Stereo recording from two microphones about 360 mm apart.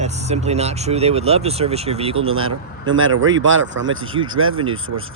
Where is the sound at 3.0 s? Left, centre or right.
Right.